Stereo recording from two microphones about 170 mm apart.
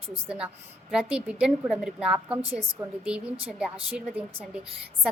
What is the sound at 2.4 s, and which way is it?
Speech, 35° right (ahead or behind).